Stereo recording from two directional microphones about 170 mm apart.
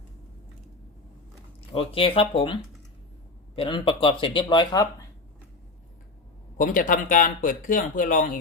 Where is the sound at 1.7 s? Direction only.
35° left (ahead or behind).